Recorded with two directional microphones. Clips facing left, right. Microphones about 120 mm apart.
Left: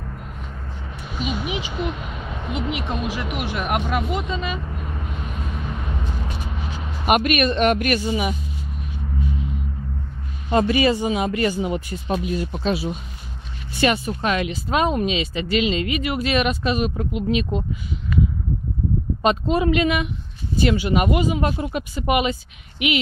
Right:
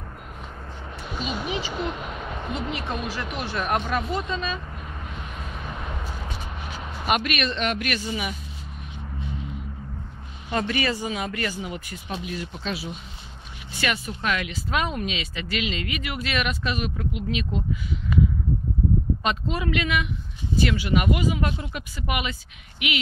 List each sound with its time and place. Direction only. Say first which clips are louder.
1.2 s speech: left 3 dB; 10° left (ahead or behind)
7.1 s speech: left 6 dB; 45° left (ahead or behind)
8.1 s speech: left 7 dB; 25° left (ahead or behind)
10.5 s speech: left 7 dB; 20° left (ahead or behind)
18.1 s a sound: even; 15° right (ahead or behind)
19.2 s speech: left 7 dB; 30° left (ahead or behind)